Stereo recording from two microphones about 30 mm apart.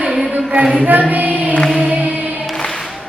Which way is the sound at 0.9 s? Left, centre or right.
Right.